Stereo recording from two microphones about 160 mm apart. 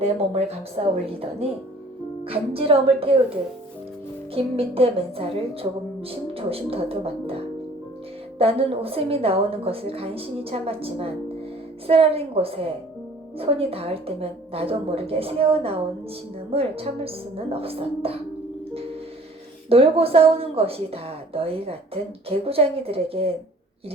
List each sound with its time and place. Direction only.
0.0 s a woman's voice: 40° right (ahead or behind)
4.4 s a woman's voice: 35° right (ahead or behind)
19.7 s a woman's voice: 35° right (ahead or behind)